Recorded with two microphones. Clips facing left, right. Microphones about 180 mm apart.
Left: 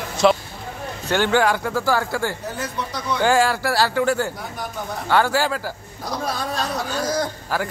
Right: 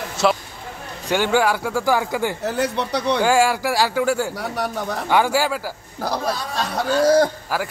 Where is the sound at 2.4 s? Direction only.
70° right (ahead or behind).